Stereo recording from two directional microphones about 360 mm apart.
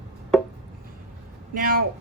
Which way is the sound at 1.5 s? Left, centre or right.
Right.